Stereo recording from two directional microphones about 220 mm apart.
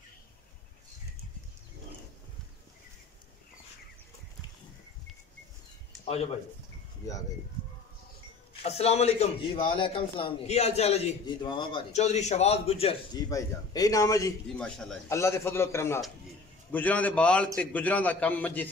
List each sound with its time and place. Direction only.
8.6 s a man's voice: 30° left (ahead or behind)
13.3 s a man's voice: 15° left (ahead or behind)